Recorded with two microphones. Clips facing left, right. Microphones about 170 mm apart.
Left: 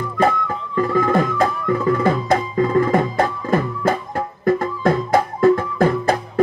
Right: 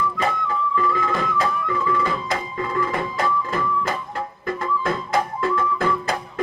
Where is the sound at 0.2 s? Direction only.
45° left (ahead or behind).